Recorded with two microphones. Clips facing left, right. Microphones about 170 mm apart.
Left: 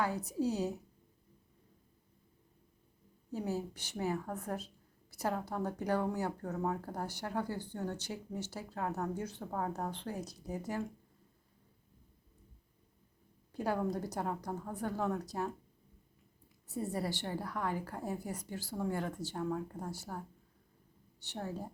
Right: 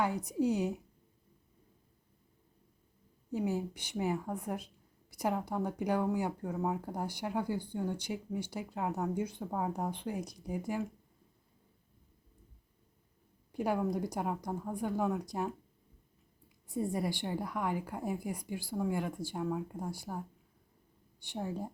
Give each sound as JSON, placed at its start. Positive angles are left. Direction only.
{"t": 0.0, "sound": "speech", "side_deg": -15}
{"t": 3.3, "sound": "speech", "side_deg": -15}
{"t": 13.5, "sound": "speech", "side_deg": -15}
{"t": 16.6, "sound": "speech", "side_deg": -15}